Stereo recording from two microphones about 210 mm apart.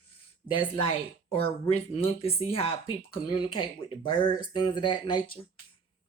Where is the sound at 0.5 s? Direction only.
25° left (ahead or behind).